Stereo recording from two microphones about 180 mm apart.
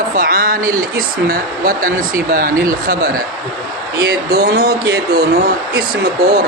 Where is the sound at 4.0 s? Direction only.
60° right (ahead or behind).